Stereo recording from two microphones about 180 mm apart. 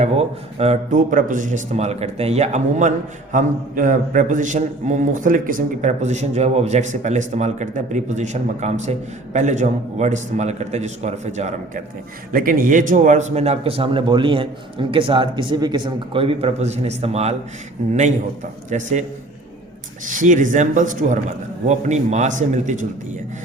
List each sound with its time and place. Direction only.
0.0 s a man's voice: 35° right (ahead or behind)
12.3 s a man's voice: 50° right (ahead or behind); by 17.3 s 35° right (ahead or behind)
18.7 s a man's voice: 40° right (ahead or behind)
20.1 s a man's voice: 45° right (ahead or behind)